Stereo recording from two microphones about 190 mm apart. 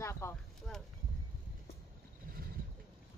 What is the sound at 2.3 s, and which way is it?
Vehicle, 50° right (ahead or behind).